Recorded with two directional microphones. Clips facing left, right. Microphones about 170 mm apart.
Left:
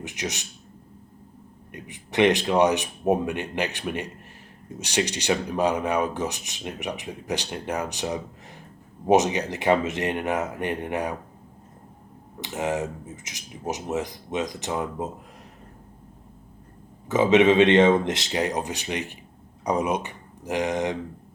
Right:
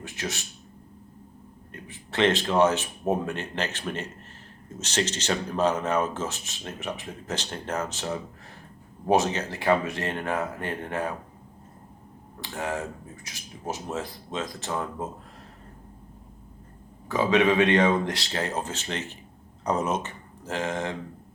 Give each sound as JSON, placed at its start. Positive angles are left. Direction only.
{"t": 0.0, "sound": "speech", "side_deg": 20}
{"t": 1.7, "sound": "speech", "side_deg": 15}
{"t": 12.4, "sound": "speech", "side_deg": 20}
{"t": 17.1, "sound": "speech", "side_deg": 20}